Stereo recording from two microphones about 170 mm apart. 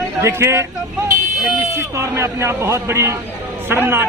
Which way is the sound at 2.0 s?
15° right (ahead or behind).